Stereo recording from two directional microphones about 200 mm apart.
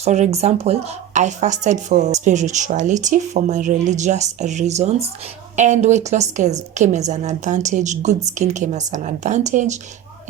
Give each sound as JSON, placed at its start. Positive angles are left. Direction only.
{"t": 0.0, "sound": "speech", "side_deg": -35}